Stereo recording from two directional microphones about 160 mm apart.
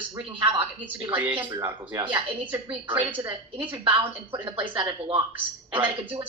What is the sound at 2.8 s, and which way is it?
Speech, 10° right (ahead or behind).